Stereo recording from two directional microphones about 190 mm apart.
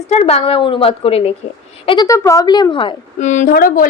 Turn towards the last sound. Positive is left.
turn(degrees=50)  # may be behind; listen again after turning